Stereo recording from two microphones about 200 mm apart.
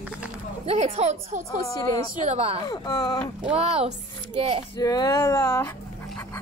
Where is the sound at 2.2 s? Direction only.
30° right (ahead or behind).